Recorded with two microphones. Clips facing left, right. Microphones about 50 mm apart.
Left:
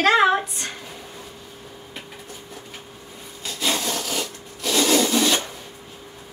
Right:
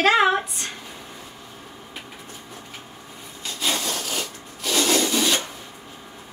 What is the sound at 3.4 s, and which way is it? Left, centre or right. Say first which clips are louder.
Rub: left 1 dB; centre.